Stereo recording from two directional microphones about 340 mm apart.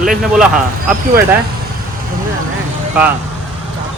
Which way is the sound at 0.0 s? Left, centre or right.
Centre.